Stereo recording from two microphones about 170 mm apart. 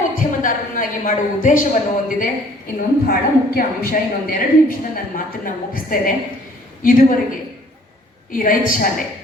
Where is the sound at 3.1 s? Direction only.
60° left (ahead or behind).